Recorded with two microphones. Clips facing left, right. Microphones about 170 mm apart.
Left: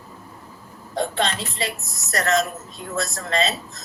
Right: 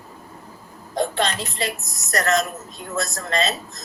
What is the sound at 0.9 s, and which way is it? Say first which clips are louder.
Speech: right 1 dB; 30° left (ahead or behind).